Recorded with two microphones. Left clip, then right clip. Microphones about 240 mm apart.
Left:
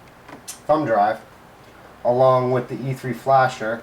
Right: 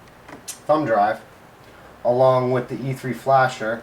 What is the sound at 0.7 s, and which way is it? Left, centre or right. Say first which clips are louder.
Speech: even; centre.